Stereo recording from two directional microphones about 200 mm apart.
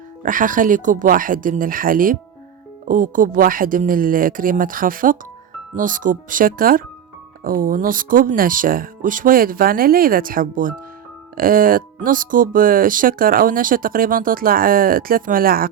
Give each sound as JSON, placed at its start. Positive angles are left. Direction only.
{"t": 0.2, "sound": "speech", "side_deg": -40}